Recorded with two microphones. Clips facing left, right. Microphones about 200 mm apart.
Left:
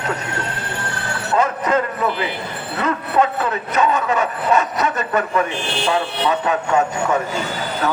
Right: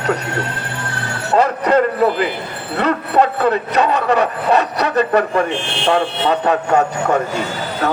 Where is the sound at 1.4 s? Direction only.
35° right (ahead or behind).